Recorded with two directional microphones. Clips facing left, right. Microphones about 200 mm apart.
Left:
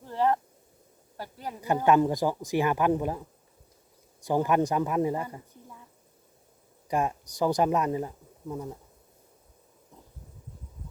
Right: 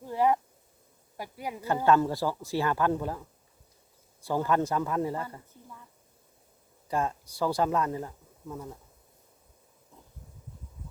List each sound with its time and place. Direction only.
0.0 s a sound: 10° right (ahead or behind)
1.1 s speech: 10° right (ahead or behind)
1.6 s speech: 15° left (ahead or behind)
6.8 s speech: 15° left (ahead or behind)